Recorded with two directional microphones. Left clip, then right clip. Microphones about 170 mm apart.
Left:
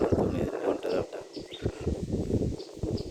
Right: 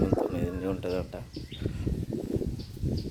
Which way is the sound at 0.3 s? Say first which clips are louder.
Left 3 dB; 5° left (ahead or behind).